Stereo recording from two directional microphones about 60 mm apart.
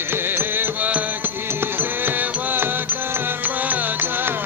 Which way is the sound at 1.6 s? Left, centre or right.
Right.